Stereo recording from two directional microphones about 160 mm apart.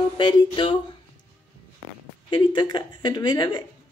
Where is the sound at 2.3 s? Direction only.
30° left (ahead or behind).